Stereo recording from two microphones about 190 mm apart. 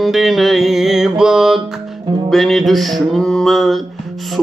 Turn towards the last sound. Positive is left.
turn(degrees=0)  # may be behind; listen again after turning